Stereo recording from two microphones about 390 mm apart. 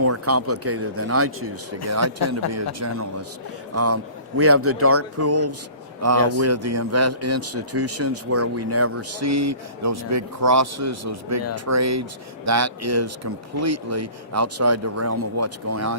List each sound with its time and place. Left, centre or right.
0.0 s a man's voice: right